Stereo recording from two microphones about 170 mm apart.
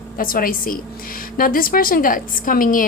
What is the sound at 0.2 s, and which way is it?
A woman's voice, 55° left (ahead or behind).